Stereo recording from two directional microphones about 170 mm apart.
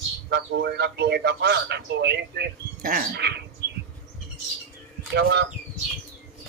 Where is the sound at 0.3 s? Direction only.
75° right (ahead or behind).